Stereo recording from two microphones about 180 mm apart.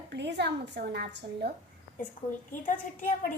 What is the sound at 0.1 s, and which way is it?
A woman's voice, 70° right (ahead or behind).